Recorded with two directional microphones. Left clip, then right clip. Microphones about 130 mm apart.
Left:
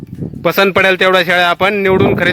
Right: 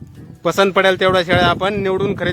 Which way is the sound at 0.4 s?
30° left (ahead or behind).